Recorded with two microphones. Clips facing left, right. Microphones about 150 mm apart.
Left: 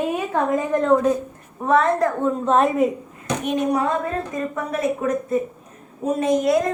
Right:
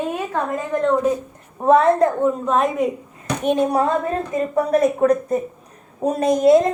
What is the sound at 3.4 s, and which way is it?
A woman's voice, 30° right (ahead or behind).